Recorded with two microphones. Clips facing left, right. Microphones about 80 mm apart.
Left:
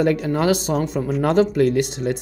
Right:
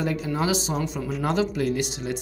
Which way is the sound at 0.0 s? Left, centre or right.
Left.